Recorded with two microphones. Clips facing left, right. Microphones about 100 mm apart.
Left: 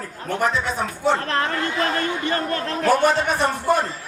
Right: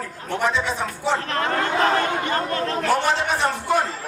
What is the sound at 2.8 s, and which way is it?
A man's voice, 45° left (ahead or behind).